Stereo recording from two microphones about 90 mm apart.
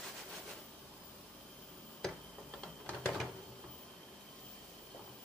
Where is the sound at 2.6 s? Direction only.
15° left (ahead or behind).